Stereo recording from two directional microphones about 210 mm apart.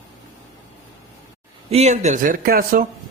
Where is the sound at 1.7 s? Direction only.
30° right (ahead or behind).